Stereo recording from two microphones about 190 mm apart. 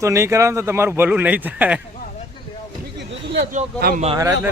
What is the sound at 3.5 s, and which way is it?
Speech, 45° right (ahead or behind).